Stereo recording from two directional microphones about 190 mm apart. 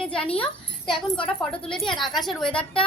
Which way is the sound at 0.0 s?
5° left (ahead or behind).